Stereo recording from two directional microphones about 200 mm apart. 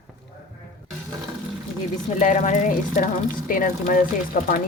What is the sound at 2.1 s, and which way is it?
Speech, 35° left (ahead or behind).